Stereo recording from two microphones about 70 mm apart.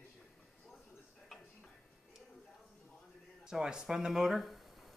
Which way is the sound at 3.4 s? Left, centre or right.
Centre.